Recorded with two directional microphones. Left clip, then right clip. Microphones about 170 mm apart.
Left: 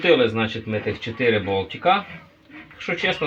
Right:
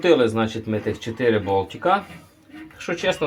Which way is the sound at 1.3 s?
15° right (ahead or behind).